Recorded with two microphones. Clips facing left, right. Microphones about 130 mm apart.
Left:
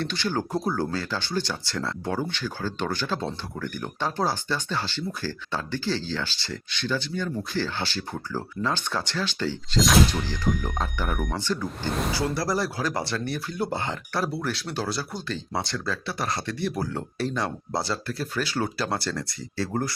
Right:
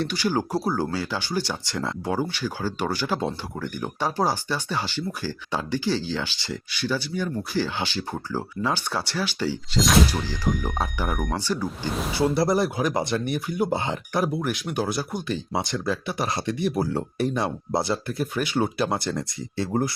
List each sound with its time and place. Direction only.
0.0 s speech: 10° right (ahead or behind)
12.3 s speech: 20° right (ahead or behind)